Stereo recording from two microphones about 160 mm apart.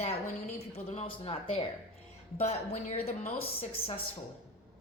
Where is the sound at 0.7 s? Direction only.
40° left (ahead or behind).